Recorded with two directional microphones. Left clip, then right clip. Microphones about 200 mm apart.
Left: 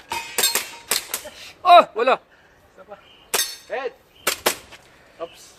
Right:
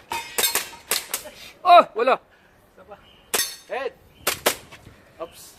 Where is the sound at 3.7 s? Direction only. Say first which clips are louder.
Left 1 dB; 45° right (ahead or behind).